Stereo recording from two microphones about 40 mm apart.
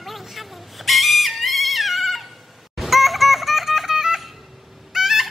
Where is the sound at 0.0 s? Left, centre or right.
Centre.